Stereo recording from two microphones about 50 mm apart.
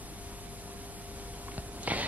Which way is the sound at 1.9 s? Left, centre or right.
Right.